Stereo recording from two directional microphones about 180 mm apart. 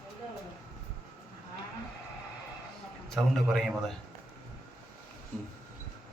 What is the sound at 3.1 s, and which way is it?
Speech, centre (ahead or behind).